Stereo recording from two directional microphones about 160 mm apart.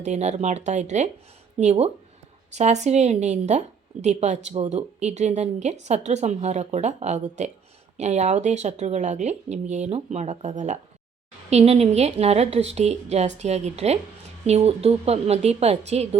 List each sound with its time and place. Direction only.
0.0 s a woman's voice: 45° right (ahead or behind)